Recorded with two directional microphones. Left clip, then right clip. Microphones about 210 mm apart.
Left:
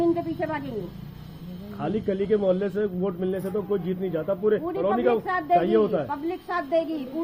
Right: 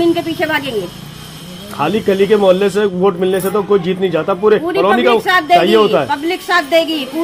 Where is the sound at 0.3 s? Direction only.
5° right (ahead or behind).